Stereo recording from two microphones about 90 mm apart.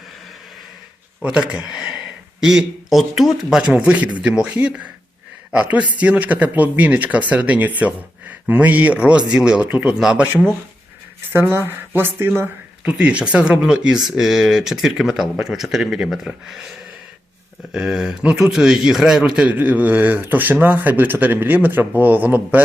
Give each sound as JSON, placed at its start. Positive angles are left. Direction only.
{"t": 1.2, "sound": "speech", "side_deg": -10}
{"t": 11.3, "sound": "speech", "side_deg": -25}
{"t": 12.8, "sound": "speech", "side_deg": -15}
{"t": 17.7, "sound": "speech", "side_deg": -5}